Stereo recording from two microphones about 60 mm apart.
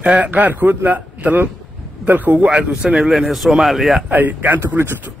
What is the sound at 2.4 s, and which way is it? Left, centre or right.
Speech, centre.